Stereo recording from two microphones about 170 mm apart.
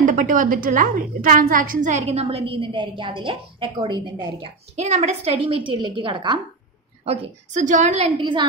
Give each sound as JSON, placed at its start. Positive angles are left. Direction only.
{"t": 0.0, "sound": "a woman's voice", "side_deg": -50}
{"t": 4.7, "sound": "a woman's voice", "side_deg": -40}
{"t": 7.1, "sound": "a woman's voice", "side_deg": -40}